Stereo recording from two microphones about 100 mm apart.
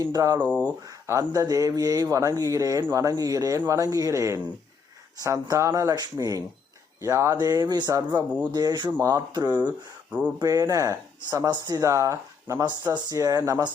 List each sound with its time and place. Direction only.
0.1 s speech: 40° right (ahead or behind)
0.3 s speech: 15° right (ahead or behind)
0.9 s speech: 35° right (ahead or behind)
7.3 s speech: 45° right (ahead or behind)
10.1 s speech: 10° right (ahead or behind)
10.4 s speech: 35° right (ahead or behind)
12.6 s speech: 45° right (ahead or behind)